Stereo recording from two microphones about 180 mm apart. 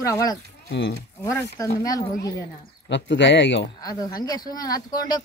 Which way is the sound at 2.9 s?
85° left.